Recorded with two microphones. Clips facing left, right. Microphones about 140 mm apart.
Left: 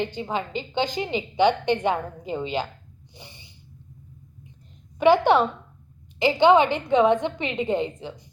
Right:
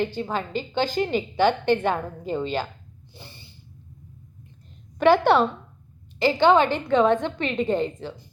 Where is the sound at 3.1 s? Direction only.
15° left (ahead or behind).